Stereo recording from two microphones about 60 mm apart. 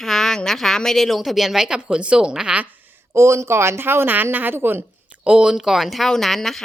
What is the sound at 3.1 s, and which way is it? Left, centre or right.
A woman's voice, right.